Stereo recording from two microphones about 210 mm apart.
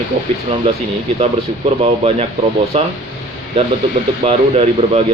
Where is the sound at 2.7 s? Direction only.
30° right (ahead or behind).